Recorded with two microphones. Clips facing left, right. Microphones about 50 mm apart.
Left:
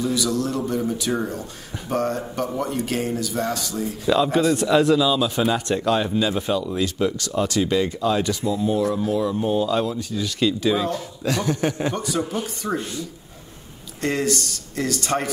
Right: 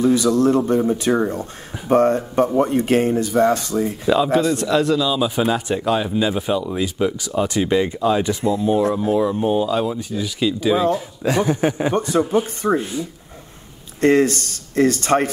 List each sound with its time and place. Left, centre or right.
0.0 s speech: right
4.1 s speech: centre
5.2 s a man's voice: centre
10.9 s a man's voice: centre
12.0 s speech: right
12.6 s a man's voice: centre
14.0 s speech: right